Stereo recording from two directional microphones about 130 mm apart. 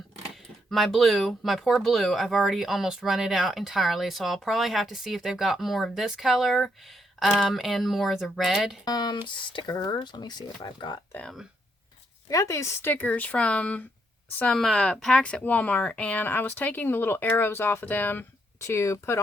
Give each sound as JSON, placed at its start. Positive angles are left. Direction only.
{"t": 0.7, "sound": "speech", "side_deg": 0}
{"t": 8.8, "sound": "speech", "side_deg": 30}
{"t": 11.1, "sound": "speech", "side_deg": 10}
{"t": 12.3, "sound": "speech", "side_deg": 25}